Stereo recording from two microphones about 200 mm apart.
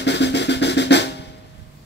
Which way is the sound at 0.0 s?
60° left (ahead or behind).